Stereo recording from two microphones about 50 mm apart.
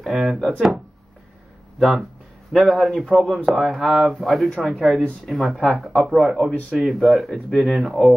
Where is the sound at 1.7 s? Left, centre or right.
Centre.